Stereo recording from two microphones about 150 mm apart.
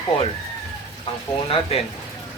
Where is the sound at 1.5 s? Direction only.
40° left (ahead or behind).